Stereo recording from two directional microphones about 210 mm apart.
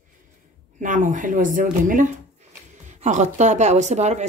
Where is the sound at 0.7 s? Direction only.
35° right (ahead or behind).